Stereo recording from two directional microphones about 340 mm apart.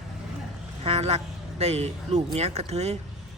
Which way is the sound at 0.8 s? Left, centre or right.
Centre.